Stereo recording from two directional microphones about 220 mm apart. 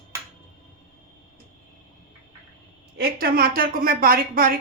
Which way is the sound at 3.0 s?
45° right (ahead or behind).